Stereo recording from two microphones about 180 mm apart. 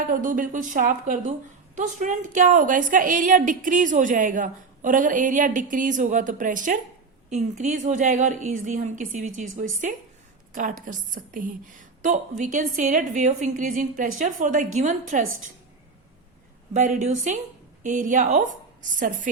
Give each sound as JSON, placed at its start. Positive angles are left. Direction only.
{"t": 0.1, "sound": "a woman's voice", "side_deg": -45}
{"t": 10.5, "sound": "a woman's voice", "side_deg": -50}
{"t": 16.7, "sound": "a woman's voice", "side_deg": -45}